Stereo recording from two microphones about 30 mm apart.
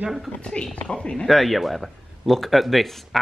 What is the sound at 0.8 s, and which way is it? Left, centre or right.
Speech, left.